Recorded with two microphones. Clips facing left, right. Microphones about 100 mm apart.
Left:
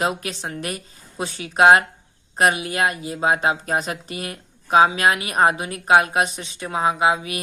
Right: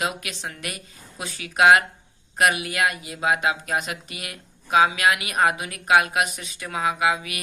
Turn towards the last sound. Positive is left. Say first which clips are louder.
# left 4 dB
turn(degrees=30)  # may be behind; listen again after turning